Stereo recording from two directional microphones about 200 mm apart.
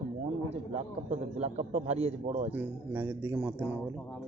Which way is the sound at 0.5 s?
35° right (ahead or behind).